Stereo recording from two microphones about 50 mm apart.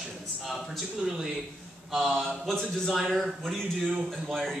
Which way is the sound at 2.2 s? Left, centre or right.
Centre.